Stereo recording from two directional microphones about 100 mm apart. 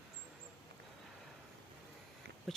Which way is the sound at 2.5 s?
Centre (ahead or behind).